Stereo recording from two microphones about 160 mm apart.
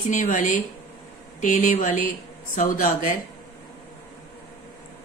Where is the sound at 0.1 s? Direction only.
50° left (ahead or behind).